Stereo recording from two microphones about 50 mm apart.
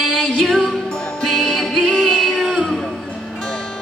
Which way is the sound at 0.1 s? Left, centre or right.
Centre.